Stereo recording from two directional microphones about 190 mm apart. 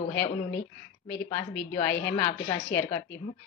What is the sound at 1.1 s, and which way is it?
A woman's voice, 10° left (ahead or behind).